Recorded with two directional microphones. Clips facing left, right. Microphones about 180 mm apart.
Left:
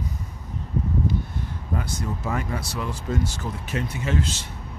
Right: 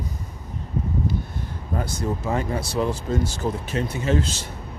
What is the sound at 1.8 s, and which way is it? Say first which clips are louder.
Speech: right 7 dB; 30° right (ahead or behind).